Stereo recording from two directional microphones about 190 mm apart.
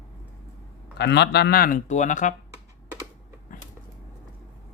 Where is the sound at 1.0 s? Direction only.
60° left (ahead or behind); by 2.4 s 40° left (ahead or behind).